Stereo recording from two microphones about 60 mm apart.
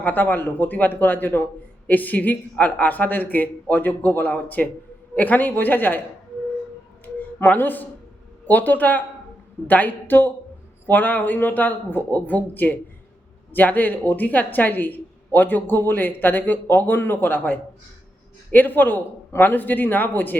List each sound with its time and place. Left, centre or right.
0.0 s a woman's voice: left
7.0 s a sound: left
8.4 s a woman's voice: left